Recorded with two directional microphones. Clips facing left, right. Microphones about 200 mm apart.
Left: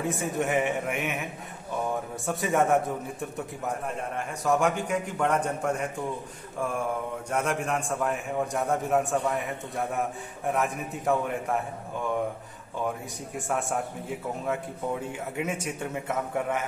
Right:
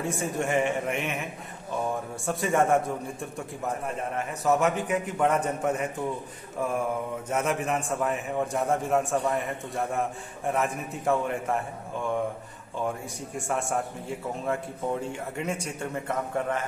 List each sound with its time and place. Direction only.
0.0 s a man's voice: centre (ahead or behind)
7.2 s a man's voice: 5° right (ahead or behind)
13.5 s a man's voice: centre (ahead or behind)